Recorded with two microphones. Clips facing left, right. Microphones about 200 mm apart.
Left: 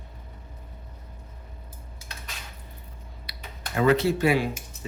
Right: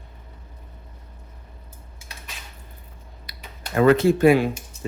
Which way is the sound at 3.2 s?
50° right (ahead or behind).